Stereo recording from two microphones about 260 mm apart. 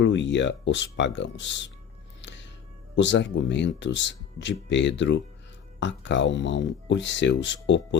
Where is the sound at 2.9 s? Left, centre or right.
Left.